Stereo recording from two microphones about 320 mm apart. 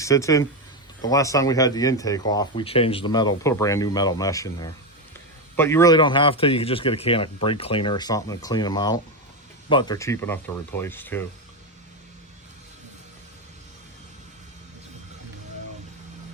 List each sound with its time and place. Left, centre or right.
0.0 s speech: centre